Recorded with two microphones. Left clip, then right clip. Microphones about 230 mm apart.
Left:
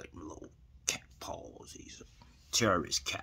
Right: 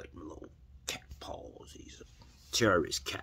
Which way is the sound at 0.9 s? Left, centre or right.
Centre.